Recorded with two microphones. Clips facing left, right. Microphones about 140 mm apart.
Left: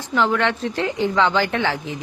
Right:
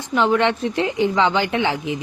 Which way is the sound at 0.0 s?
20° right (ahead or behind).